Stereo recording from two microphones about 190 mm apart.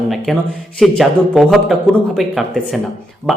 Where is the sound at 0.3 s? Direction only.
Centre (ahead or behind).